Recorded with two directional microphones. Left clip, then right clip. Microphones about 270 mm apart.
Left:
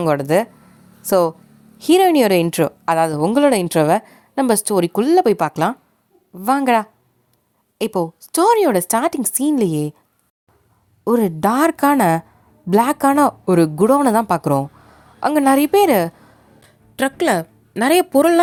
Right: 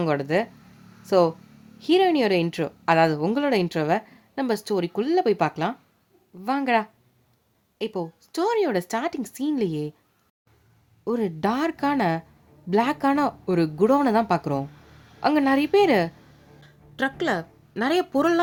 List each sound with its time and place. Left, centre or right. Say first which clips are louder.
0.0 s speech: left 7 dB; left
11.0 s a woman's voice: left 9 dB; left